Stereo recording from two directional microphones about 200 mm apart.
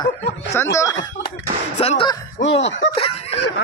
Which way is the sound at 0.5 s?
15° left (ahead or behind).